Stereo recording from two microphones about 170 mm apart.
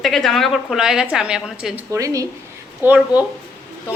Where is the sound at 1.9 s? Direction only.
20° right (ahead or behind).